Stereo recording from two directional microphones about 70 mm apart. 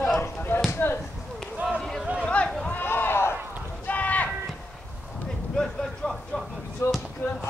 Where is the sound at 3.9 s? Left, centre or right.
Left.